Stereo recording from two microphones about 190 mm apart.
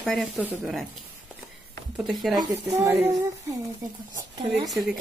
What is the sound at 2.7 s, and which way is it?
Speech, 10° right (ahead or behind).